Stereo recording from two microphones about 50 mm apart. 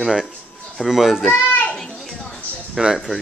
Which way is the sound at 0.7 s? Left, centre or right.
Centre.